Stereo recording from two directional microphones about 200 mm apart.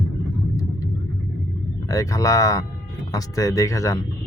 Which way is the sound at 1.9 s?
15° left (ahead or behind).